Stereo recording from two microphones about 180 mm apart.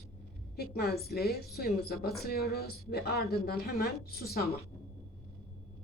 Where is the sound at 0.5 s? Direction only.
60° left (ahead or behind).